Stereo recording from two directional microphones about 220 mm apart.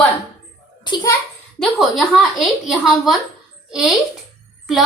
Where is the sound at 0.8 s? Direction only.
20° left (ahead or behind).